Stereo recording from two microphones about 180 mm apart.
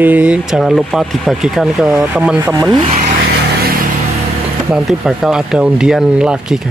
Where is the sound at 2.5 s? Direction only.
25° right (ahead or behind).